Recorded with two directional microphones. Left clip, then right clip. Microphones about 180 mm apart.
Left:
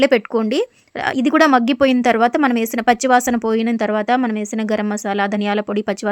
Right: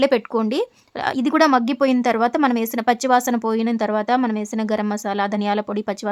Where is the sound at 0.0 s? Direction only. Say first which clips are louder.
Left 3 dB; 15° left (ahead or behind).